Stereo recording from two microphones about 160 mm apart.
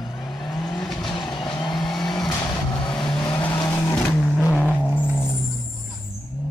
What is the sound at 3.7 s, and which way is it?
Vehicle, 10° left (ahead or behind).